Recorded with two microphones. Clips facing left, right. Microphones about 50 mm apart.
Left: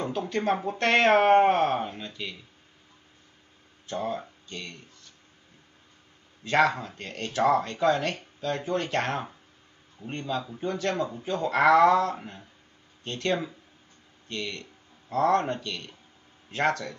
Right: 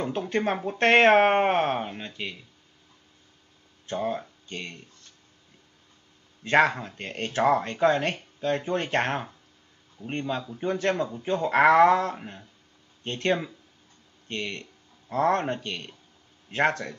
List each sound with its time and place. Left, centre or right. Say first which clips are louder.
0.3 s speech: left 1 dB; right
3.9 s speech: right 2 dB; right
6.4 s speech: right 2 dB; right